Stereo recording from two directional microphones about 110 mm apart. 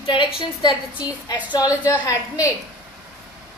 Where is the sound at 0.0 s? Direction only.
50° left (ahead or behind); by 2.4 s 30° left (ahead or behind).